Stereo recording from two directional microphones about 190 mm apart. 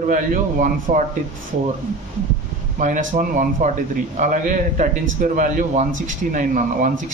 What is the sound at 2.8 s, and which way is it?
A man's voice, 45° right (ahead or behind).